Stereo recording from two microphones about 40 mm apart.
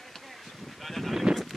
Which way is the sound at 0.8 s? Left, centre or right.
Centre.